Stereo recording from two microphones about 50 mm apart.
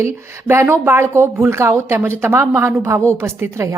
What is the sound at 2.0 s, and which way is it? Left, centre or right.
Speech, right.